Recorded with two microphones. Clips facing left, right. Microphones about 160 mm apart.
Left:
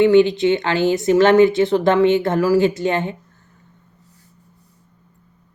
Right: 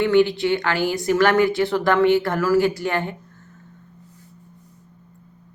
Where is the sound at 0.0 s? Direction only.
20° left (ahead or behind).